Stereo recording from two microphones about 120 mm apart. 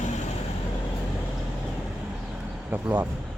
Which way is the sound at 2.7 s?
15° right (ahead or behind).